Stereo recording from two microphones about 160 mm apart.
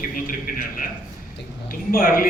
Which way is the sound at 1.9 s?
65° left (ahead or behind).